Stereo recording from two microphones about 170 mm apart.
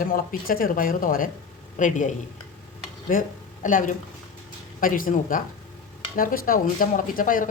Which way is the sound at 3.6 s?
50° left (ahead or behind).